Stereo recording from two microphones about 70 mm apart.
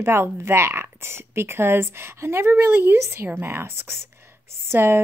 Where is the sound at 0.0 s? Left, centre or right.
Right.